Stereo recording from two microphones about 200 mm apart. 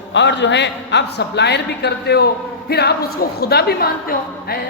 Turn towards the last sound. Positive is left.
turn(degrees=50)  # may be behind; listen again after turning